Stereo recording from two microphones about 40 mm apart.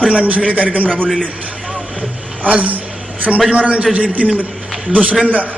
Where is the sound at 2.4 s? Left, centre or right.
Right.